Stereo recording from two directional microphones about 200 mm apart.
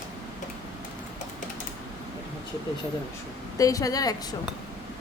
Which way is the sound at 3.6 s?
15° left (ahead or behind).